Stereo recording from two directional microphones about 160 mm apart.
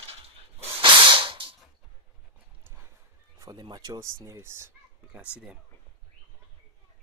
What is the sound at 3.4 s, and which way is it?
Neigh, 25° right (ahead or behind).